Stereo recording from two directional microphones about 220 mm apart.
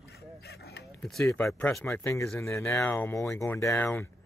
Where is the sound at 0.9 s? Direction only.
5° left (ahead or behind).